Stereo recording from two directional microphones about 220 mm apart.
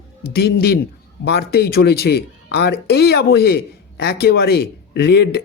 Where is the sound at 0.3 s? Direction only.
50° left (ahead or behind).